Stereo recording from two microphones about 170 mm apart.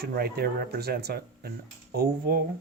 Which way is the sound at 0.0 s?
65° right (ahead or behind).